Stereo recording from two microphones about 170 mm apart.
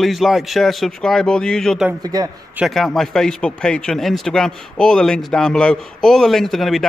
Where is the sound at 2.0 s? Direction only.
20° right (ahead or behind).